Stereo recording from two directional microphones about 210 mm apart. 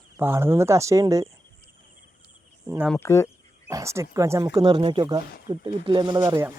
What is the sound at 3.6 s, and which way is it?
Speech, 15° right (ahead or behind).